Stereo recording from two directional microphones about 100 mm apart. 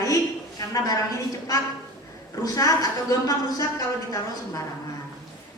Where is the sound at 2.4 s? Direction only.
35° left (ahead or behind).